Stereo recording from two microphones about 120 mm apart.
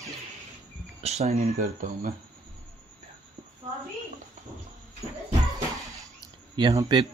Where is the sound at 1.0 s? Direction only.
65° right (ahead or behind); by 1.9 s 85° right.